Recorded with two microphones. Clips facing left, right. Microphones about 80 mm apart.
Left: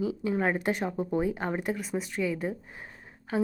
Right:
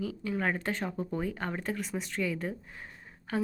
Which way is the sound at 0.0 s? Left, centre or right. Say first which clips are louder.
Left 4 dB; centre.